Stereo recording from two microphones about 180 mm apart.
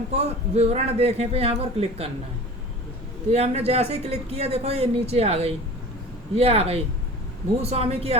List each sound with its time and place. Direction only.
0.1 s speech: 35° right (ahead or behind)
3.3 s speech: 35° right (ahead or behind)